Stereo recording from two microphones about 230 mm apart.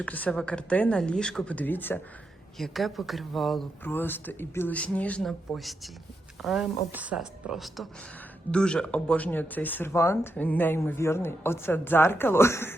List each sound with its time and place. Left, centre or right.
0.0 s speech: centre